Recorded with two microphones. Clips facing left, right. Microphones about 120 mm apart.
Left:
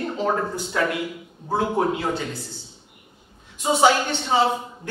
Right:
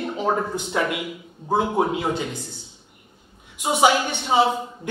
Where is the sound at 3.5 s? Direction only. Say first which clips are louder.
Left 1 dB; 15° right (ahead or behind).